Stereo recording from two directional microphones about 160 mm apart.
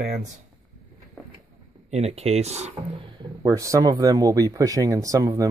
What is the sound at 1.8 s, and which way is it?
Speech, 40° right (ahead or behind).